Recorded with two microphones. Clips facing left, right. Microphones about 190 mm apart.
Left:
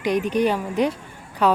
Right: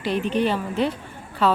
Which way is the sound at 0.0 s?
15° left (ahead or behind).